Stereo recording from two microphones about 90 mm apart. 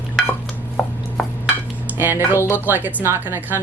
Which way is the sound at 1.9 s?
25° right (ahead or behind).